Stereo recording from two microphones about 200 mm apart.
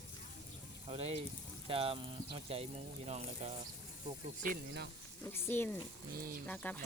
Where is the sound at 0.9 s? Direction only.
30° right (ahead or behind).